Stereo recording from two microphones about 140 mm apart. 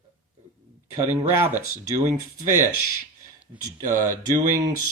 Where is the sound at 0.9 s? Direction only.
20° right (ahead or behind).